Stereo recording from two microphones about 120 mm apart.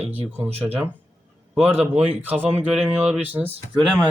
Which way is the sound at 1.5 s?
15° right (ahead or behind).